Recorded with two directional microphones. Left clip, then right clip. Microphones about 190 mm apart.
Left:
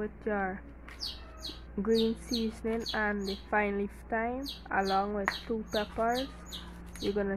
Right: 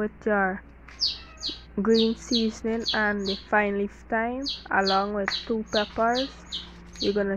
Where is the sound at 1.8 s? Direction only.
15° right (ahead or behind).